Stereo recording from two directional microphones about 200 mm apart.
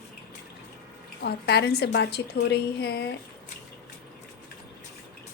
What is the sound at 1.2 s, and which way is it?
A woman's voice, 55° left (ahead or behind).